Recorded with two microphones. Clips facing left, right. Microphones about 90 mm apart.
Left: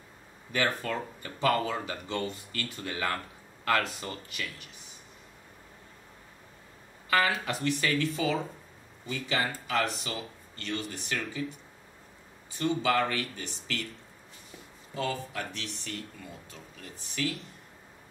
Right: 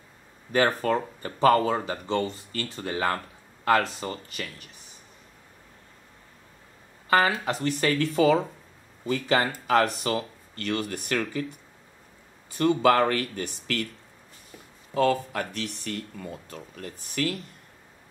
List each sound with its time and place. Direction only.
0.5 s speech: 40° right (ahead or behind)
7.1 s speech: 35° right (ahead or behind)
7.4 s speech: 45° right (ahead or behind)
12.5 s speech: 50° right (ahead or behind)
15.0 s speech: 55° right (ahead or behind)